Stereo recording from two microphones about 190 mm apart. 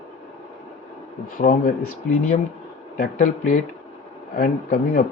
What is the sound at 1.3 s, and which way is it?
Speech, 45° left (ahead or behind).